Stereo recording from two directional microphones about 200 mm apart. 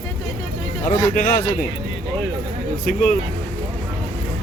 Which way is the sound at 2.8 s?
45° left (ahead or behind).